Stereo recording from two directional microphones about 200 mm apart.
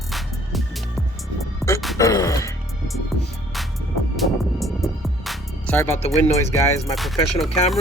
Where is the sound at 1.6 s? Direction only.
Centre (ahead or behind).